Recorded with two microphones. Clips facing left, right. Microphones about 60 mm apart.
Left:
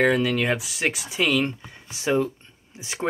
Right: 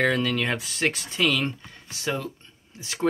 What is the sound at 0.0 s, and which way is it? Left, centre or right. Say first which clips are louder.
Speech: left 3 dB; centre.